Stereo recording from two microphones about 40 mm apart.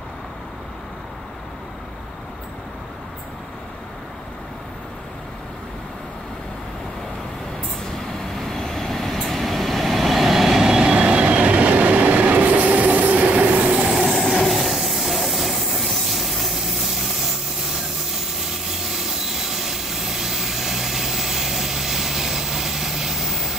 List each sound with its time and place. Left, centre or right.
8.4 s vehicle: centre
11.0 s train: right
13.8 s train: centre